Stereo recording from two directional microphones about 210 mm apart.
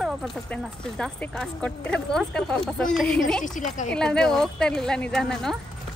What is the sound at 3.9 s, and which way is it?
Speech, 5° left (ahead or behind).